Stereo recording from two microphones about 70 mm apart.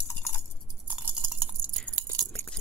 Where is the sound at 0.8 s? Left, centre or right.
Right.